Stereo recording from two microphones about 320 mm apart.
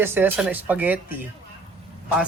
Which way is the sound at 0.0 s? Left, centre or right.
Centre.